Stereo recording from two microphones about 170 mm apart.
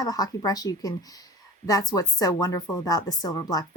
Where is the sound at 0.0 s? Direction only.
20° left (ahead or behind).